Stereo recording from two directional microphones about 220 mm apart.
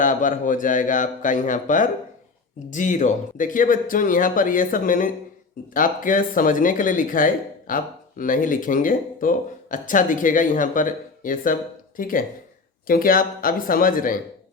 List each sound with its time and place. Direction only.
0.0 s speech: 35° left (ahead or behind)